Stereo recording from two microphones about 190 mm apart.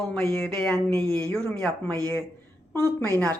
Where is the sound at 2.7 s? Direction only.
15° right (ahead or behind).